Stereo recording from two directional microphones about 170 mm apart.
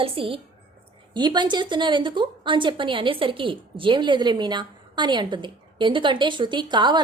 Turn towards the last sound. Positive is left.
turn(degrees=-25)  # may be behind; listen again after turning